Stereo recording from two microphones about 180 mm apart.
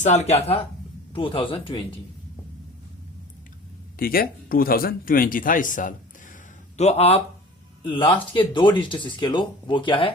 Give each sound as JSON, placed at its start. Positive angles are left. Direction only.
{"t": 0.0, "sound": "speech", "side_deg": 40}
{"t": 3.9, "sound": "speech", "side_deg": 55}
{"t": 6.7, "sound": "speech", "side_deg": 35}